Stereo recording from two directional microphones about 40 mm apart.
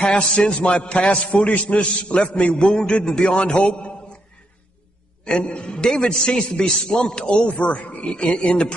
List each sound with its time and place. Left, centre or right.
0.0 s a man's voice: left
5.2 s a man's voice: left
7.4 s a man's voice: left